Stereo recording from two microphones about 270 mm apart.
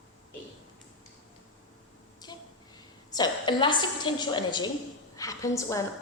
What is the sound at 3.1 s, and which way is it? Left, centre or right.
A woman's voice, centre.